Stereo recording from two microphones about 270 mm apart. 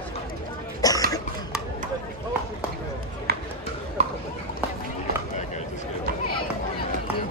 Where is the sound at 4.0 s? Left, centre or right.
Right.